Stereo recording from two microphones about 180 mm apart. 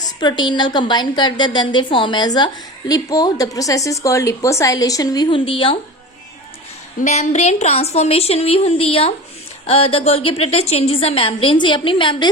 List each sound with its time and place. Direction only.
0.2 s a woman's voice: 25° left (ahead or behind)
7.0 s a woman's voice: 40° left (ahead or behind)